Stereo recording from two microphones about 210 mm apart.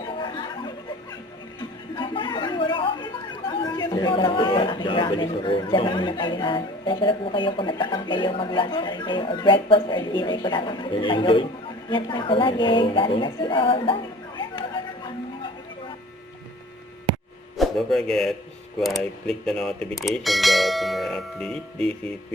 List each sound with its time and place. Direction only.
0.2 s music: 20° left (ahead or behind)
2.0 s a woman's voice: 25° left (ahead or behind)
17.6 s a man's voice: centre (ahead or behind)